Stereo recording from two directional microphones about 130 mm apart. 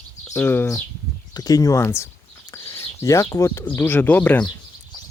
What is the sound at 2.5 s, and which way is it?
Bird, 20° left (ahead or behind).